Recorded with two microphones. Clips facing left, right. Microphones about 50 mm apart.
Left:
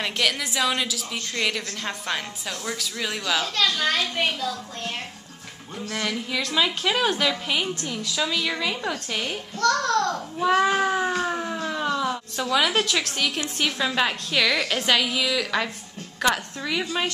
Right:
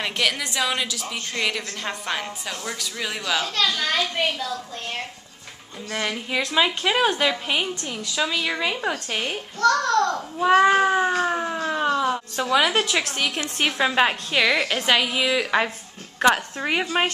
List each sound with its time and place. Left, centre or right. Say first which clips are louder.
0.0 s a child's voice: right 1 dB; centre
0.4 s cat: even; centre
1.4 s a child's voice: right 1 dB; centre
5.9 s a woman's voice: right 1 dB; right
10.9 s cat: right 3 dB; centre
11.1 s a child's voice: right 3 dB; centre
13.4 s a woman's voice: right 3 dB; right
16.6 s speech: right 4 dB; right